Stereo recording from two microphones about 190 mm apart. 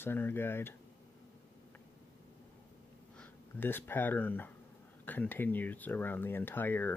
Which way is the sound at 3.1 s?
10° left (ahead or behind).